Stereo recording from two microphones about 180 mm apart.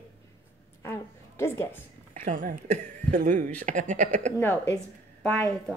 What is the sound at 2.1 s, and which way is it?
Speech, 45° right (ahead or behind).